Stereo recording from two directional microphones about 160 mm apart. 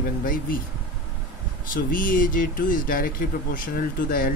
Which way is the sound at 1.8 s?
60° left (ahead or behind).